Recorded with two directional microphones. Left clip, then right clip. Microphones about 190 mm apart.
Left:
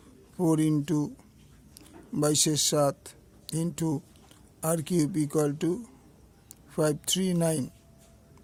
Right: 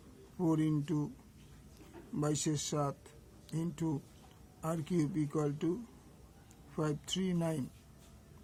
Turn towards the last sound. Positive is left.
turn(degrees=50)  # may be behind; listen again after turning